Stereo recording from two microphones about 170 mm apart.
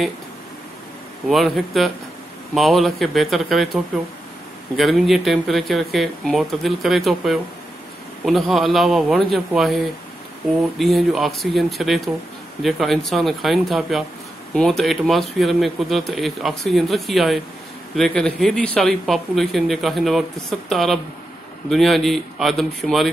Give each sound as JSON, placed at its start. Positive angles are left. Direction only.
{"t": 1.3, "sound": "speech", "side_deg": 0}
{"t": 10.8, "sound": "speech", "side_deg": 0}